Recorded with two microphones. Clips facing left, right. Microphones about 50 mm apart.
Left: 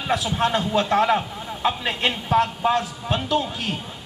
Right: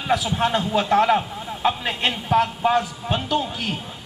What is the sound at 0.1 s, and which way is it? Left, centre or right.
A man's voice, centre.